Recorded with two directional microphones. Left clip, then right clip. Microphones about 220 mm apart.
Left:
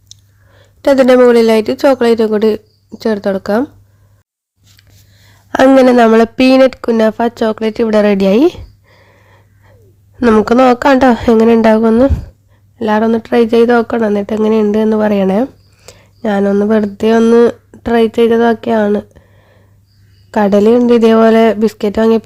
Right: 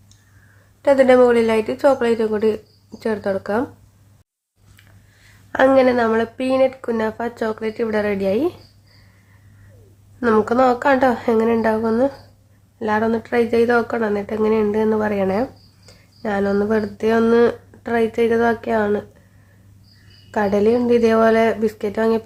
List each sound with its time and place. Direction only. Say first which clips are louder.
0.8 s speech: left 5 dB; 35° left (ahead or behind)
5.5 s speech: left 7 dB; 45° left (ahead or behind)
10.2 s speech: left 7 dB; 35° left (ahead or behind)
20.3 s speech: left 8 dB; 40° left (ahead or behind)